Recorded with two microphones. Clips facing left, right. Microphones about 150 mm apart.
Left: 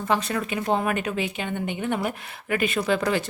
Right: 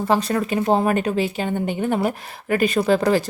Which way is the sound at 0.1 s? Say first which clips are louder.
Right 4 dB; 35° right (ahead or behind).